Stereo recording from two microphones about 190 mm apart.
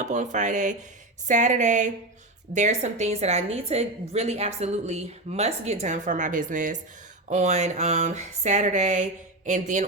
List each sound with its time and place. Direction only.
0.0 s a woman's voice: 40° right (ahead or behind)